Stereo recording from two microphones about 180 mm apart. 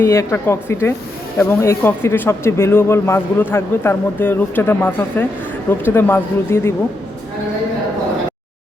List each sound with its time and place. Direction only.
0.0 s a man's voice: 15° left (ahead or behind)